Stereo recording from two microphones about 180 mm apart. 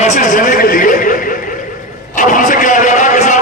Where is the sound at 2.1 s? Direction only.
45° left (ahead or behind).